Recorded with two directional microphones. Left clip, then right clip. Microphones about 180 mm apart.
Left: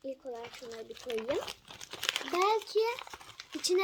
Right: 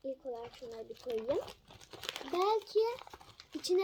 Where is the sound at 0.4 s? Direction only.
5° left (ahead or behind).